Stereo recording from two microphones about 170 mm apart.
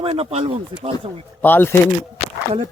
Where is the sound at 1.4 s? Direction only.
10° left (ahead or behind).